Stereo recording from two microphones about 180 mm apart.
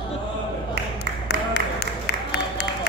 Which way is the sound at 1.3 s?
60° left (ahead or behind).